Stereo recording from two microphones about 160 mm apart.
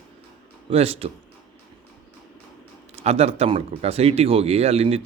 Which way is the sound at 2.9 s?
40° right (ahead or behind).